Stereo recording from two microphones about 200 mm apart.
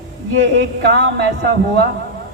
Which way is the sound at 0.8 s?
60° right (ahead or behind).